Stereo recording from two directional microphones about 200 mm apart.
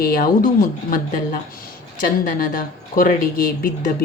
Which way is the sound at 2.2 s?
45° left (ahead or behind).